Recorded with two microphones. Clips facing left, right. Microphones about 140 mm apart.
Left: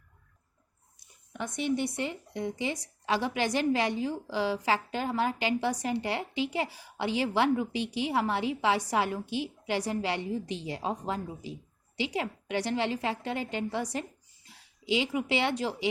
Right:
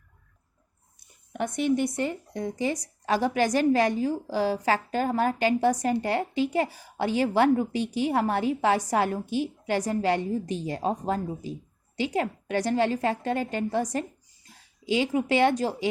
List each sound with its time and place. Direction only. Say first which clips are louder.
0.9 s a woman's voice: right 7 dB; 55° right (ahead or behind)